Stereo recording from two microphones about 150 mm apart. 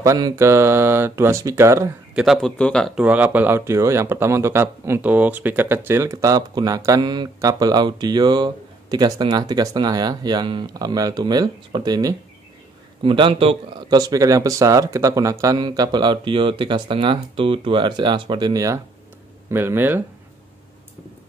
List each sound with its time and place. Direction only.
0.0 s speech: 20° right (ahead or behind)
2.1 s speech: 5° right (ahead or behind)
3.0 s speech: 10° right (ahead or behind)